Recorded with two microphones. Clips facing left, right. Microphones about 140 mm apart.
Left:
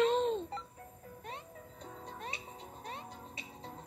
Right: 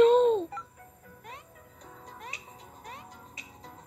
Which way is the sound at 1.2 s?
25° left (ahead or behind).